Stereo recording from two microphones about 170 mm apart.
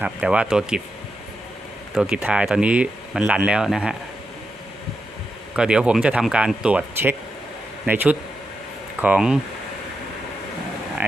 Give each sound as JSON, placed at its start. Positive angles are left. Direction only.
{"t": 0.0, "sound": "speech", "side_deg": -5}
{"t": 2.0, "sound": "speech", "side_deg": -5}
{"t": 5.5, "sound": "a man's voice", "side_deg": -5}